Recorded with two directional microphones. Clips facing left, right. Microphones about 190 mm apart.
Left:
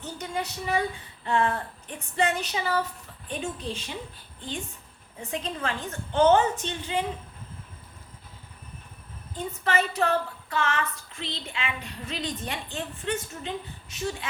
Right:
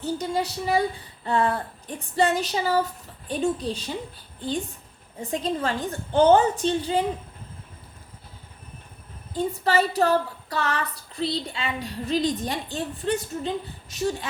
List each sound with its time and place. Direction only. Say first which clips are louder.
0.0 s child singing: right 6 dB; 35° right (ahead or behind)
4.4 s a woman's voice: right 7 dB; 35° right (ahead or behind)
5.2 s child singing: right 5 dB; 35° right (ahead or behind)
9.3 s child singing: right 5 dB; 35° right (ahead or behind)